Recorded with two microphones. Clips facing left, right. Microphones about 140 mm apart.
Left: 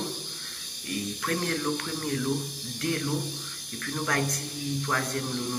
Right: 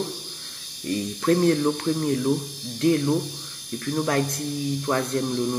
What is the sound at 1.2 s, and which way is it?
Speech, 30° right (ahead or behind).